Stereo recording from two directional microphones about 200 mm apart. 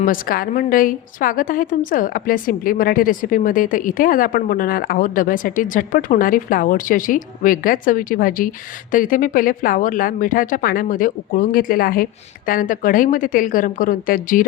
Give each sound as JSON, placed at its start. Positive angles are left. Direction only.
{"t": 0.0, "sound": "a woman's voice", "side_deg": 45}